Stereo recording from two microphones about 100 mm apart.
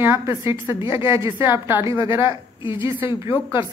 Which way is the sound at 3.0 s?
55° left (ahead or behind).